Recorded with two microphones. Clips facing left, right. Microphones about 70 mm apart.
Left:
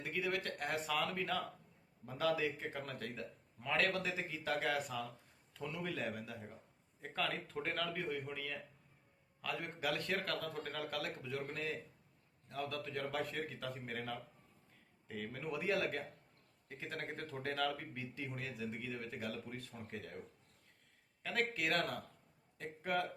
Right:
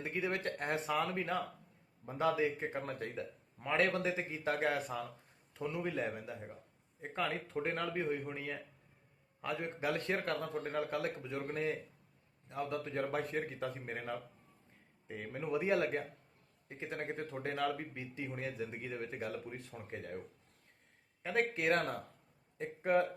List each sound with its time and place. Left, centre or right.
0.0 s speech: right
21.2 s speech: right